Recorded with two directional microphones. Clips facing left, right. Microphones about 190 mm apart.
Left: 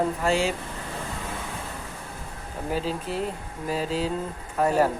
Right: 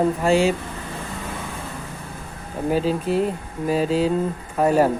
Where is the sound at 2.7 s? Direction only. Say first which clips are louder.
Right 8 dB; 15° right (ahead or behind).